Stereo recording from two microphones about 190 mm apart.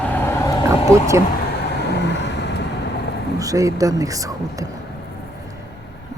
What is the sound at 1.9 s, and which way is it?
Vehicle, 65° left (ahead or behind).